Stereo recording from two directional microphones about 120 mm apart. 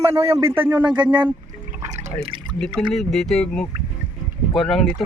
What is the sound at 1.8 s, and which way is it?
Drip, 70° right (ahead or behind).